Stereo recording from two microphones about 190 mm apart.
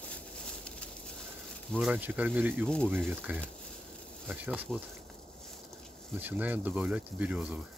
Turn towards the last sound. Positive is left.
turn(degrees=-5)  # may be behind; listen again after turning